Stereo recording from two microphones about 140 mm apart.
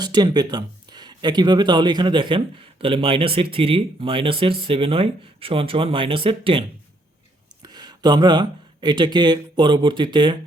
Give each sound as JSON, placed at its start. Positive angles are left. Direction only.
{"t": 0.0, "sound": "speech", "side_deg": -30}
{"t": 7.6, "sound": "speech", "side_deg": -30}